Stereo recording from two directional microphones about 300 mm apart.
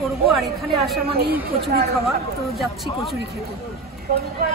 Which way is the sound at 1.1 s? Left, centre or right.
Right.